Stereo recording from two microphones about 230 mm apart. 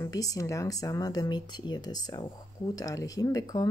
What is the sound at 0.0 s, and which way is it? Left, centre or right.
Speech, centre.